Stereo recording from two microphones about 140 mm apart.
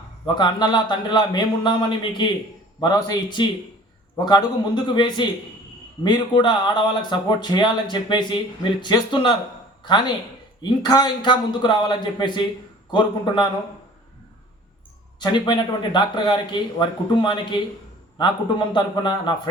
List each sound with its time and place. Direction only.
0.3 s speech: 30° left (ahead or behind)
15.2 s speech: 30° left (ahead or behind)